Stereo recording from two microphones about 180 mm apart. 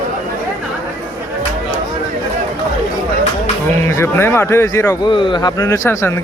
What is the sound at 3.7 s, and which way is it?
Speech, 15° left (ahead or behind).